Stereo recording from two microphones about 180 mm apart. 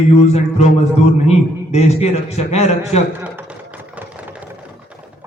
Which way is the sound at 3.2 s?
10° right (ahead or behind).